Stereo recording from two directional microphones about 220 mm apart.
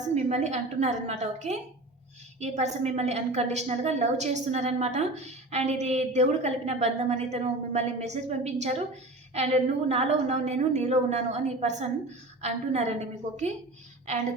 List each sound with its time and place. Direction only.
0.1 s a woman's voice: 30° right (ahead or behind)